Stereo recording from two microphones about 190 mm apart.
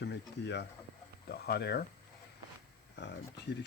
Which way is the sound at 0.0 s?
65° left (ahead or behind).